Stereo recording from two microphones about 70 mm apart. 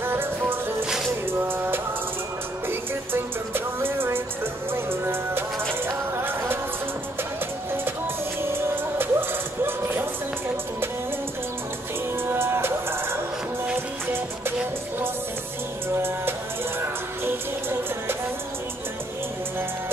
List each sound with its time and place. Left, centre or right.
0.0 s music: right
8.4 s music: right
12.3 s music: right
16.8 s music: right